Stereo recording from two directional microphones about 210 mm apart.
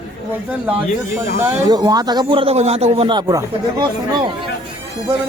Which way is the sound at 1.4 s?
10° right (ahead or behind).